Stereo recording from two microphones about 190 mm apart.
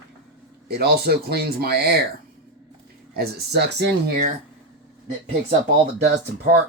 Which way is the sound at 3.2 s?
60° right (ahead or behind).